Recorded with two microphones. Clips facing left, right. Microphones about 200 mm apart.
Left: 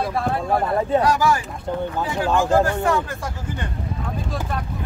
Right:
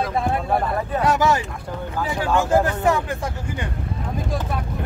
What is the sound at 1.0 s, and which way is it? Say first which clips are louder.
Speech: even; 20° right (ahead or behind).